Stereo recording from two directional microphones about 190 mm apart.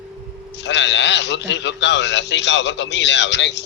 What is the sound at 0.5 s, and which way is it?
A man's voice, 70° left (ahead or behind).